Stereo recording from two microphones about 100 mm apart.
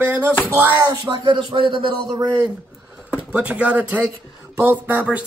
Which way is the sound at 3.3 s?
10° right (ahead or behind).